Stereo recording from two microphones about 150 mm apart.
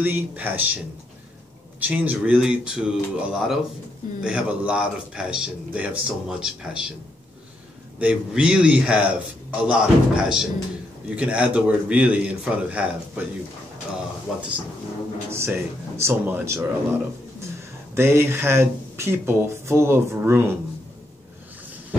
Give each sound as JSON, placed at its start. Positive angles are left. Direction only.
{"t": 0.0, "sound": "a man's voice", "side_deg": -15}
{"t": 1.8, "sound": "a man's voice", "side_deg": -10}
{"t": 8.0, "sound": "a man's voice", "side_deg": -10}
{"t": 15.3, "sound": "a man's voice", "side_deg": -15}
{"t": 17.9, "sound": "a man's voice", "side_deg": -15}